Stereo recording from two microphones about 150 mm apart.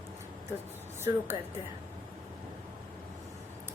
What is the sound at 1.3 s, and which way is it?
Speech, 35° left (ahead or behind).